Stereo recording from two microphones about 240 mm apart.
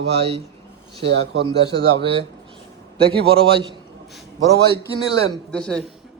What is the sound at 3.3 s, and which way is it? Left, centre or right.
Speech, right.